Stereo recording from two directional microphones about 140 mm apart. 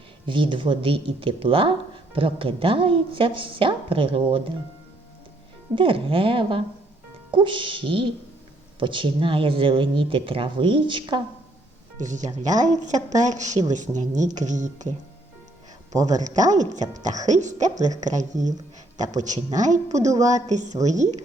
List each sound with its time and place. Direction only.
0.3 s speech: 35° right (ahead or behind)
5.7 s speech: 40° right (ahead or behind)
11.9 s speech: 60° right (ahead or behind)
15.9 s speech: 25° right (ahead or behind)
16.2 s speech: 60° right (ahead or behind)